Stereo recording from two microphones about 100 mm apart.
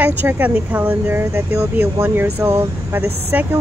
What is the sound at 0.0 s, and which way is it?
Speech, 20° right (ahead or behind).